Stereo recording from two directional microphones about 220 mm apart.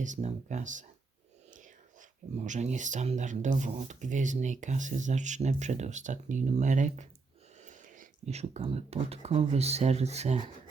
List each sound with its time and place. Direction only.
0.0 s speech: 30° right (ahead or behind)